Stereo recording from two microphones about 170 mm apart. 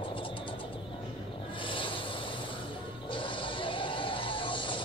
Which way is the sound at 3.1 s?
30° left (ahead or behind).